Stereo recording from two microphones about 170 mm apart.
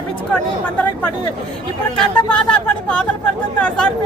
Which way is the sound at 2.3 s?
5° left (ahead or behind).